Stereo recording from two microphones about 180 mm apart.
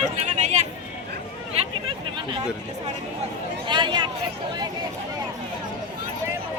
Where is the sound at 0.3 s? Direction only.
40° right (ahead or behind).